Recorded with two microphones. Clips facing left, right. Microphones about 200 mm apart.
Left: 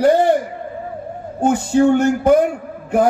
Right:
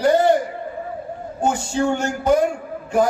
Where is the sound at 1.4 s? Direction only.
60° left (ahead or behind).